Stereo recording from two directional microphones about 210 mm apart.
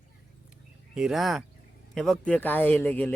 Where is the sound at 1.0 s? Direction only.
Centre (ahead or behind).